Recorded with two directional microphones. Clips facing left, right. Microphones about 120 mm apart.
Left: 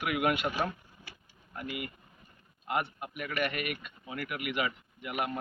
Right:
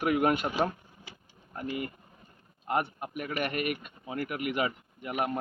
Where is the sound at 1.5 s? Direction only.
35° right (ahead or behind).